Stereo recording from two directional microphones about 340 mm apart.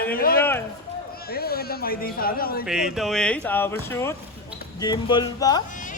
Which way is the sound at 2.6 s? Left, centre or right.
Centre.